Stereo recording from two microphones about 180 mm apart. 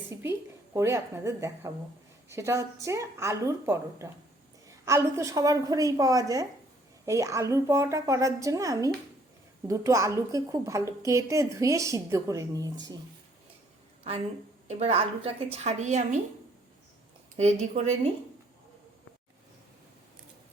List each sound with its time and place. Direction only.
0.1 s a woman's voice: 15° right (ahead or behind)
14.7 s a woman's voice: 35° right (ahead or behind)
17.3 s a woman's voice: 40° right (ahead or behind)